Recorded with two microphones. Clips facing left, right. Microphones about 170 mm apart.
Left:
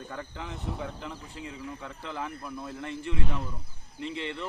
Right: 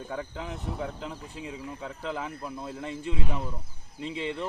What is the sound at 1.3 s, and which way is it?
Speech, 15° right (ahead or behind).